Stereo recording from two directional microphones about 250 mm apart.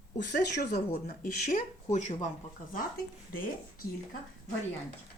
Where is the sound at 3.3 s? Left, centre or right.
Left.